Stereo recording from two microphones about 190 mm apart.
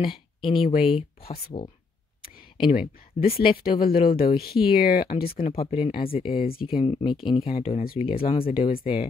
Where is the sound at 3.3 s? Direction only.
30° left (ahead or behind).